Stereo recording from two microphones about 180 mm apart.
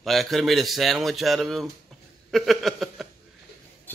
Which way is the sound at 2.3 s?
Centre (ahead or behind).